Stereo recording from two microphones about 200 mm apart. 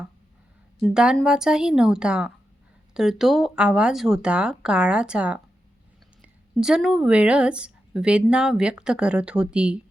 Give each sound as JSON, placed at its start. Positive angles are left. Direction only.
{"t": 0.8, "sound": "speech", "side_deg": 0}